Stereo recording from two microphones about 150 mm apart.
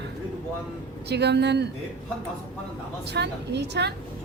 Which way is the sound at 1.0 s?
90° right.